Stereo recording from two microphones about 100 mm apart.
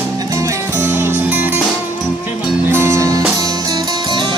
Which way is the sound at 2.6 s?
25° right (ahead or behind).